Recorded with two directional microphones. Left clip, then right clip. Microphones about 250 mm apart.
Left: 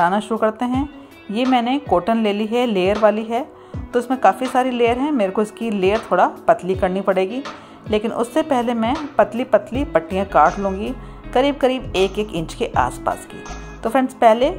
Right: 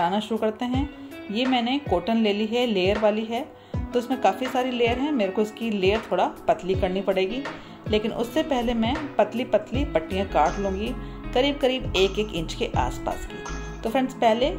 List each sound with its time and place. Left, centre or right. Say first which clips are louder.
0.0 s a woman's voice: left 7 dB; left